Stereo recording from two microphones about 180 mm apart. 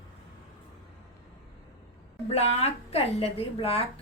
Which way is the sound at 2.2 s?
35° left (ahead or behind).